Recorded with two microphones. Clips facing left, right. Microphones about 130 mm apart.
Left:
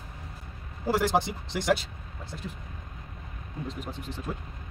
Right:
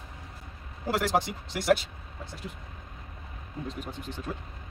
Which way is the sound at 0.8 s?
Centre (ahead or behind).